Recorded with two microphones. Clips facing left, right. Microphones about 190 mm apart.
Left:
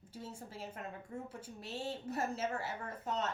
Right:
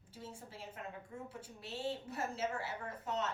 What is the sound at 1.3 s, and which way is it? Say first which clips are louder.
A woman's voice: left 2 dB; 40° left (ahead or behind).